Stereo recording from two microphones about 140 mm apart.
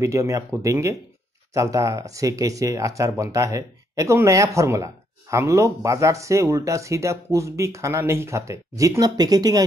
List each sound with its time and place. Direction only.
0.0 s speech: 20° right (ahead or behind)